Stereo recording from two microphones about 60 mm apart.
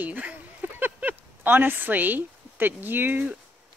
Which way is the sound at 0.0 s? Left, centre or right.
Right.